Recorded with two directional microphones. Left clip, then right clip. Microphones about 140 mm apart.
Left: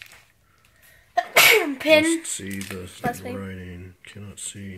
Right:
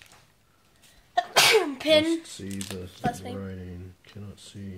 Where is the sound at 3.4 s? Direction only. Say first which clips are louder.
Left 3 dB; 10° left (ahead or behind).